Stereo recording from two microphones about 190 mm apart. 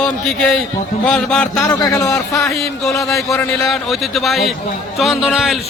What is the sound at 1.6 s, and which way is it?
Speech, 20° left (ahead or behind).